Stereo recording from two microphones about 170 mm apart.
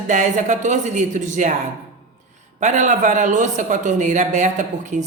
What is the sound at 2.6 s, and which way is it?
Speech, 45° right (ahead or behind).